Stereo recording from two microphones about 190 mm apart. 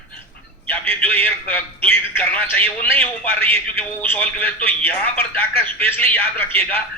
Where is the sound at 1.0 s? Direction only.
10° left (ahead or behind).